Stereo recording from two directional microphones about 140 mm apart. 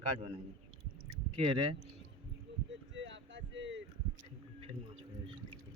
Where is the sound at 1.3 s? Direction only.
40° right (ahead or behind).